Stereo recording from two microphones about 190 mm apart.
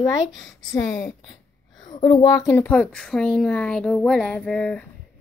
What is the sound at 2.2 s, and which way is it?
Speech, 15° left (ahead or behind).